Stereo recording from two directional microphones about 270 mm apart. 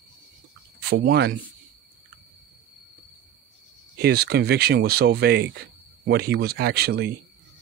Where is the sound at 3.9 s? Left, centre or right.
Right.